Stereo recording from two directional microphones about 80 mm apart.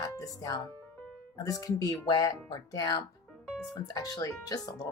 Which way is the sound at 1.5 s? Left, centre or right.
Left.